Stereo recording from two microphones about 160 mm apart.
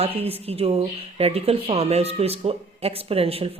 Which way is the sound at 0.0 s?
40° right (ahead or behind).